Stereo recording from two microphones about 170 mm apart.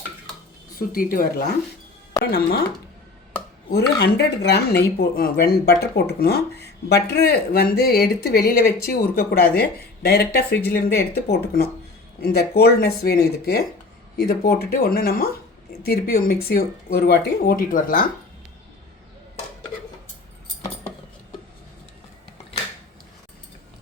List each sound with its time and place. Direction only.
0.8 s speech: 60° left (ahead or behind)
3.7 s speech: 70° left (ahead or behind); by 18.0 s 55° left (ahead or behind)